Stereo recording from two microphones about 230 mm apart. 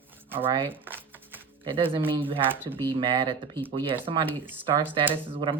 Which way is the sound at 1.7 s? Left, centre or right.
Right.